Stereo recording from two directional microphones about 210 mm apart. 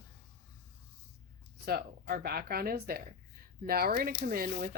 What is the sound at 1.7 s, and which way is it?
Speech, 45° right (ahead or behind).